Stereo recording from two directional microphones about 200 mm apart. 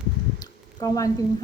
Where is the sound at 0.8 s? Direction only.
15° left (ahead or behind).